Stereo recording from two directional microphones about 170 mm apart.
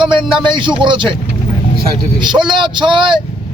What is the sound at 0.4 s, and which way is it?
Speech, 30° right (ahead or behind).